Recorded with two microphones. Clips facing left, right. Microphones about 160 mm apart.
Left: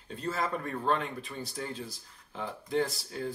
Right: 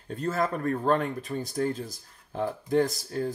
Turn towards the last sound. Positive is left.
turn(degrees=-45)  # may be behind; listen again after turning